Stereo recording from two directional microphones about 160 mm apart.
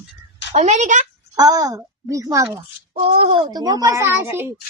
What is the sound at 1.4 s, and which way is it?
A child's voice, 25° right (ahead or behind).